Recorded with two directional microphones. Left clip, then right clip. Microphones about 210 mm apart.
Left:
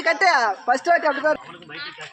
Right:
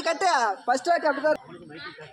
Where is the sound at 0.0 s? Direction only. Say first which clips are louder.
Left 5 dB; 25° left (ahead or behind).